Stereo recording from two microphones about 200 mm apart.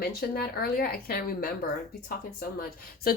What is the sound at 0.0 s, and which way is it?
A woman's voice, 50° left (ahead or behind).